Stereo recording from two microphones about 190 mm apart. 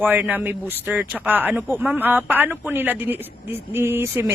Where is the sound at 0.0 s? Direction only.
10° right (ahead or behind).